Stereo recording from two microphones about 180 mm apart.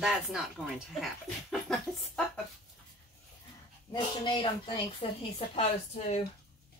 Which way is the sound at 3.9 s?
25° left (ahead or behind).